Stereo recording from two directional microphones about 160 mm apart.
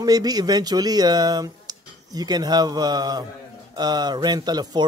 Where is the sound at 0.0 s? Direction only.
25° right (ahead or behind).